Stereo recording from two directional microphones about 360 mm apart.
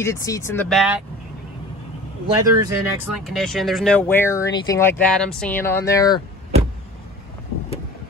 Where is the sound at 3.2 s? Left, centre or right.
Centre.